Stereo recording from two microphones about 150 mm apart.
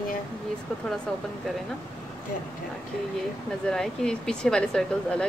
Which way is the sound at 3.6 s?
5° left (ahead or behind).